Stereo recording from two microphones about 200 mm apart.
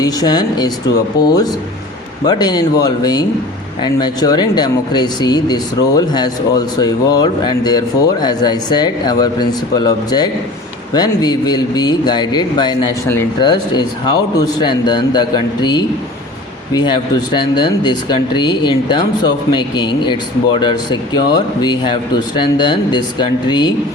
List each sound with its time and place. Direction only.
0.0 s speech: 20° left (ahead or behind)
2.2 s speech: 20° left (ahead or behind)